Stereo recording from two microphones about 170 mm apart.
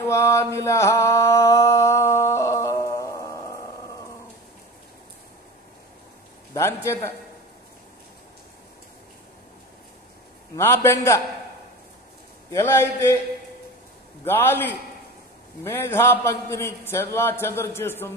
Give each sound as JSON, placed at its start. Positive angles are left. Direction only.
{"t": 0.0, "sound": "mantra", "side_deg": 15}
{"t": 6.5, "sound": "a man's voice", "side_deg": 15}
{"t": 10.5, "sound": "a man's voice", "side_deg": 15}
{"t": 12.4, "sound": "a man's voice", "side_deg": 15}
{"t": 14.2, "sound": "a man's voice", "side_deg": 10}